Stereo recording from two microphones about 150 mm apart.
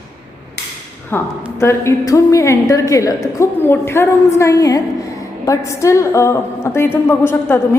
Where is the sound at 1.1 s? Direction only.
15° left (ahead or behind).